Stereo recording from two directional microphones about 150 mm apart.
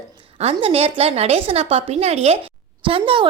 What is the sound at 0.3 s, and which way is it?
A woman's voice, 45° right (ahead or behind).